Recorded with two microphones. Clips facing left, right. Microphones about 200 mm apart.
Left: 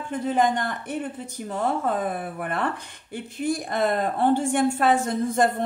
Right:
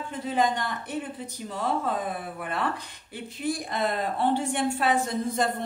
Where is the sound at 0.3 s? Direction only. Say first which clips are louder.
Left 3 dB; 50° left (ahead or behind).